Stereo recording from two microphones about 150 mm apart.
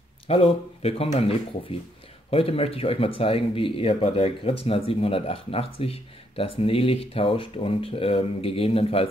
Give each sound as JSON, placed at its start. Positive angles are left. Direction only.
{"t": 0.3, "sound": "speech", "side_deg": 40}